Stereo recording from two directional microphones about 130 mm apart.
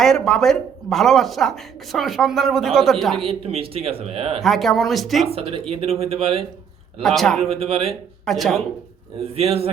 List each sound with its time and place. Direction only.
0.0 s speech: 5° left (ahead or behind)
3.2 s speech: 45° right (ahead or behind)
4.4 s speech: centre (ahead or behind)
5.2 s speech: 50° right (ahead or behind)
7.0 s speech: centre (ahead or behind)
7.4 s speech: 50° right (ahead or behind)
8.2 s speech: centre (ahead or behind)
9.3 s speech: 50° right (ahead or behind)